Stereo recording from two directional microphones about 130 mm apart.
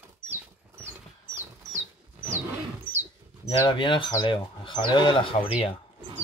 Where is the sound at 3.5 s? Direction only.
40° left (ahead or behind).